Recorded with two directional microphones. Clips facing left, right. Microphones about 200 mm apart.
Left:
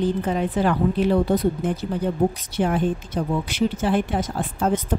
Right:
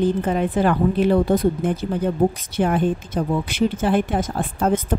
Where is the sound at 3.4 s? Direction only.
55° right (ahead or behind).